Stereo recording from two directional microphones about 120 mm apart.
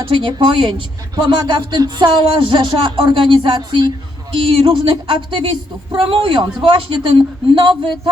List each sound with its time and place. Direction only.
0.1 s a woman's voice: 45° right (ahead or behind)